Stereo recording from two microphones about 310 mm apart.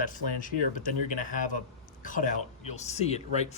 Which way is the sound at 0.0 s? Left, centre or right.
Left.